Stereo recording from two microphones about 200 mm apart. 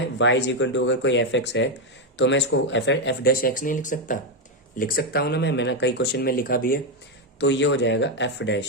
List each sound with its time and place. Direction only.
0.2 s speech: 65° left (ahead or behind); by 6.7 s 45° left (ahead or behind)
7.3 s speech: 65° left (ahead or behind)